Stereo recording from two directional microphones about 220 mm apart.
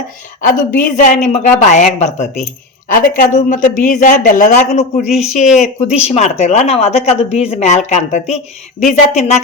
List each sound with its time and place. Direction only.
0.4 s speech: 40° left (ahead or behind)
5.0 s speech: centre (ahead or behind)
5.5 s speech: 30° left (ahead or behind)